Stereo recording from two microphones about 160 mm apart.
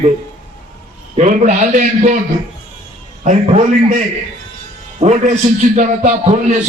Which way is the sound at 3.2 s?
50° right (ahead or behind).